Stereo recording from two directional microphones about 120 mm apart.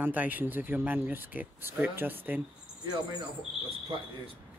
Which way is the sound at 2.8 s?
35° right (ahead or behind).